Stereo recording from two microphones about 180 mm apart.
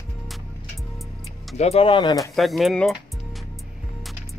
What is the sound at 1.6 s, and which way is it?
Speech, 35° left (ahead or behind).